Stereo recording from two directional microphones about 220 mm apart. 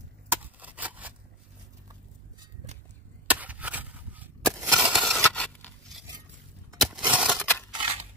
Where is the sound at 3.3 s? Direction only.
5° right (ahead or behind).